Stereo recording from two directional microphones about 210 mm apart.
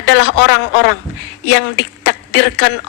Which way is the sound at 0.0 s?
55° left (ahead or behind).